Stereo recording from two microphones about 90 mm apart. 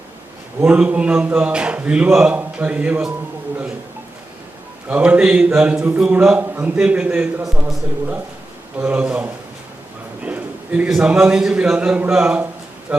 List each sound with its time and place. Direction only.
0.6 s a man's voice: 10° right (ahead or behind)
4.9 s a man's voice: 15° right (ahead or behind)
8.8 s a man's voice: 15° right (ahead or behind)
10.2 s a sound: 15° right (ahead or behind)
10.8 s a man's voice: 10° right (ahead or behind)